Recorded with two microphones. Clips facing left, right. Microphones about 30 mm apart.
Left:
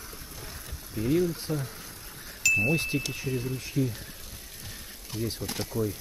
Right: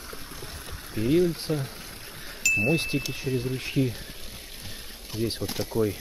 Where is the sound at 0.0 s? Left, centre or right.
Right.